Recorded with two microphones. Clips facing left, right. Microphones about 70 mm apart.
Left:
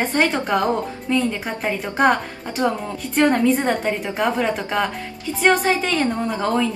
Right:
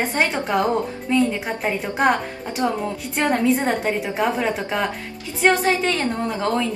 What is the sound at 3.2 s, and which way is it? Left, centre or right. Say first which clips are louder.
A woman's voice: left 3 dB; centre.